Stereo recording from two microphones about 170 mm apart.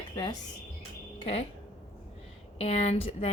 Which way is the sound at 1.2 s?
35° left (ahead or behind).